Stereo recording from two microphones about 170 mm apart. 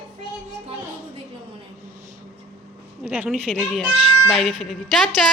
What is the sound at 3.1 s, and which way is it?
Speech, 5° right (ahead or behind).